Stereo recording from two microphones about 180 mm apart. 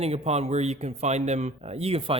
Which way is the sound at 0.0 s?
35° right (ahead or behind).